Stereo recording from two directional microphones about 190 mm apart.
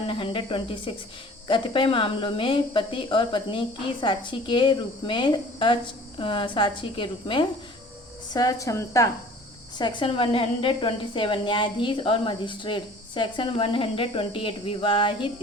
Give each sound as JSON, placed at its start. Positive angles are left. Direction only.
{"t": 0.1, "sound": "a woman's voice", "side_deg": 25}